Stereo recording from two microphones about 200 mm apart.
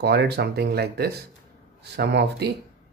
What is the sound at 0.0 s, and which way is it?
Speech, 55° right (ahead or behind).